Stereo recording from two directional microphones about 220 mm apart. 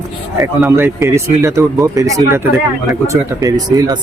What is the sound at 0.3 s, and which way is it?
Speech, 10° right (ahead or behind).